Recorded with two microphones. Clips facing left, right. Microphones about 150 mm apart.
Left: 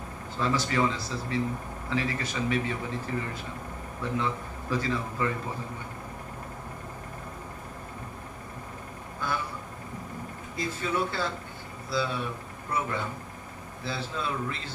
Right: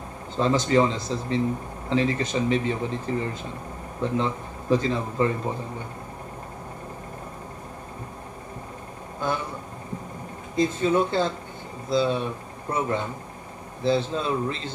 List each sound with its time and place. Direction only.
0.4 s speech: 25° right (ahead or behind)
9.2 s a sound: 20° right (ahead or behind)
10.5 s speech: 20° right (ahead or behind)